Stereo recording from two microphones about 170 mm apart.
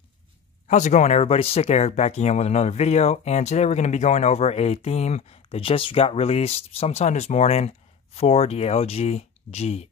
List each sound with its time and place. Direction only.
0.7 s speech: 45° left (ahead or behind)